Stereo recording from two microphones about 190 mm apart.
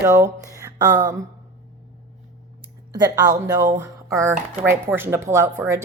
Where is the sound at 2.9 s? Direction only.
20° right (ahead or behind).